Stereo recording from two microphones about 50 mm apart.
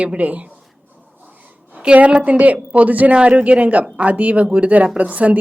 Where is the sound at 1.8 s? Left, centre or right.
Right.